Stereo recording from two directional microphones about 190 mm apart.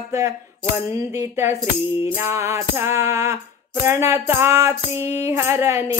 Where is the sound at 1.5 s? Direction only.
25° left (ahead or behind).